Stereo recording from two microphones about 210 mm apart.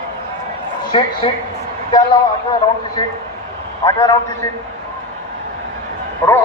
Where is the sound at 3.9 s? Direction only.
15° left (ahead or behind).